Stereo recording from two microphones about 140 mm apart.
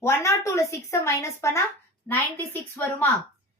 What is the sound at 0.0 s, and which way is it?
A woman's voice, 20° left (ahead or behind).